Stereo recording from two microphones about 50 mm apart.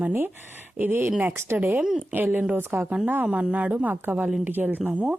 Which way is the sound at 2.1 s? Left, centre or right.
Right.